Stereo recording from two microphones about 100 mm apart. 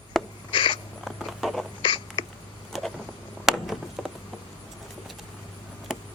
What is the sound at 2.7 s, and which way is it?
Vehicle, centre (ahead or behind).